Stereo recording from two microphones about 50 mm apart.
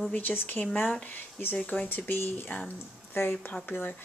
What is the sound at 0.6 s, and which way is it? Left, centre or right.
Speech, left.